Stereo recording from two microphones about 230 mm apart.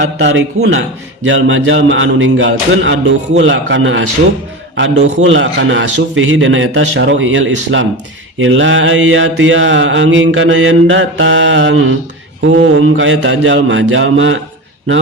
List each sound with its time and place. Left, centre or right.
0.0 s a man's voice: right
1.2 s mantra: right